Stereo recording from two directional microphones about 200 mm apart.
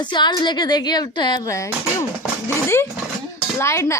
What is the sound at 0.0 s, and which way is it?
Speech, 20° left (ahead or behind).